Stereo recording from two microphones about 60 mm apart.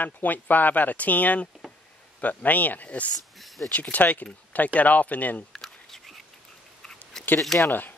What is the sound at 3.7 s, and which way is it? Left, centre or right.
Speech, left.